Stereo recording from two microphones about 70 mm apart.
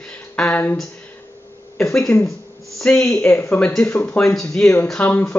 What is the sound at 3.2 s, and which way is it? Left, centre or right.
Speech, left.